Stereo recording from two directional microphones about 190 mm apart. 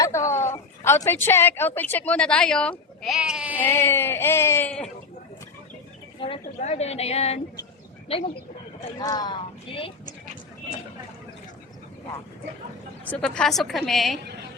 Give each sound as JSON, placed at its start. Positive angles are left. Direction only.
{"t": 0.0, "sound": "a woman's voice", "side_deg": 15}
{"t": 3.6, "sound": "a woman's voice", "side_deg": 10}
{"t": 6.1, "sound": "a woman's voice", "side_deg": 30}
{"t": 9.0, "sound": "speech", "side_deg": 20}
{"t": 13.1, "sound": "a woman's voice", "side_deg": 5}